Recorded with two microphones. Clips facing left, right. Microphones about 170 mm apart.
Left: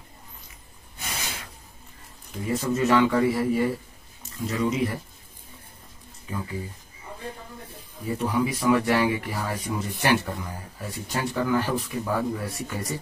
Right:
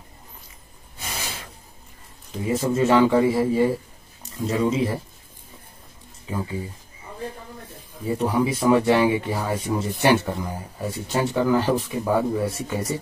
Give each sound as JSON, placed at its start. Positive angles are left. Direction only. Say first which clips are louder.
{"t": 0.9, "sound": "a sound", "louder": "right 2 dB", "side_deg": -30}
{"t": 2.4, "sound": "speech", "louder": "right 3 dB", "side_deg": -25}
{"t": 6.3, "sound": "speech", "louder": "right 4 dB", "side_deg": -25}
{"t": 8.1, "sound": "speech", "louder": "right 3 dB", "side_deg": -30}